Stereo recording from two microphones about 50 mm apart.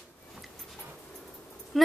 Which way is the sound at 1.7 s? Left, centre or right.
Centre.